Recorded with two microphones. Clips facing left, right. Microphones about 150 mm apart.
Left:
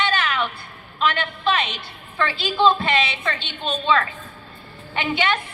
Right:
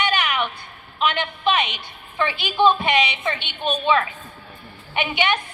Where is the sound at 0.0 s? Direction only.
15° right (ahead or behind).